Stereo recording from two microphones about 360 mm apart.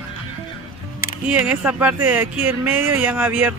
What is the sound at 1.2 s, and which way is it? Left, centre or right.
Speech, centre.